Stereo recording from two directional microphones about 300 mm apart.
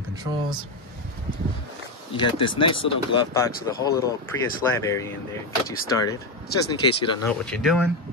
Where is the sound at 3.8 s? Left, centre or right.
Centre.